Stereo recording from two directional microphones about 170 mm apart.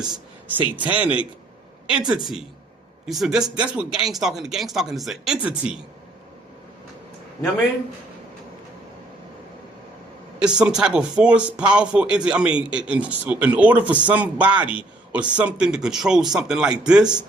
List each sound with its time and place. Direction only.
0.1 s speech: 10° right (ahead or behind)
10.6 s speech: 5° right (ahead or behind)